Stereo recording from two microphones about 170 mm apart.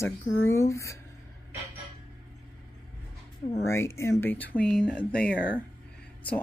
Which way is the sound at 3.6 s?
15° left (ahead or behind).